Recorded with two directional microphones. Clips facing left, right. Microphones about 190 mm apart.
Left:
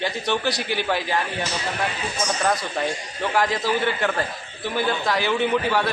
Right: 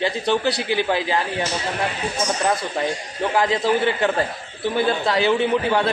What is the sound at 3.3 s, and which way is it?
A man's voice, 25° right (ahead or behind).